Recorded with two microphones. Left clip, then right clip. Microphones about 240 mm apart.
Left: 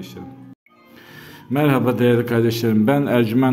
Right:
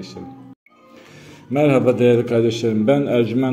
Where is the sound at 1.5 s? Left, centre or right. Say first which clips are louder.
Right 3 dB; centre.